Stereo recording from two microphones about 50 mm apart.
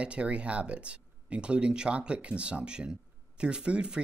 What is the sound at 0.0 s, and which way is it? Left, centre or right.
Speech, right.